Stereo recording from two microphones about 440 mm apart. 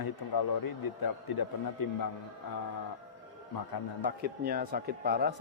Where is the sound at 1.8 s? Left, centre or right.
Left.